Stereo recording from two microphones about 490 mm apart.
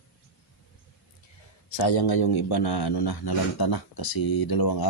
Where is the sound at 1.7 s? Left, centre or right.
Left.